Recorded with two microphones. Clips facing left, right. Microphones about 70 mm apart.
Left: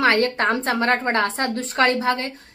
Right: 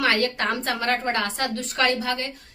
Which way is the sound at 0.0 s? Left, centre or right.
Left.